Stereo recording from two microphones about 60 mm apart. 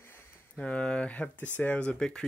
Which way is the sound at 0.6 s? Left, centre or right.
Centre.